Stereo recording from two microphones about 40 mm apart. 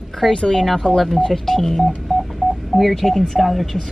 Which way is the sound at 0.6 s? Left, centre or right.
Centre.